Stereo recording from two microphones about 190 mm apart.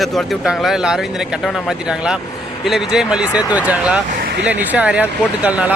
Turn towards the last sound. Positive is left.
turn(degrees=-5)  # may be behind; listen again after turning